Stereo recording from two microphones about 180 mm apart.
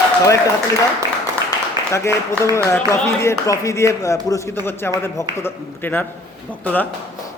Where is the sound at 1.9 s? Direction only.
15° left (ahead or behind).